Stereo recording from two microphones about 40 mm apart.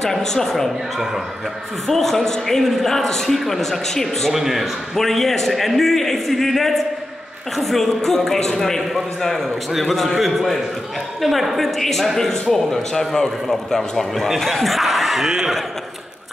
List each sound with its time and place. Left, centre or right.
0.0 s a man's voice: centre
1.9 s a man's voice: centre
4.3 s a man's voice: centre
4.9 s a man's voice: centre
15.2 s speech: centre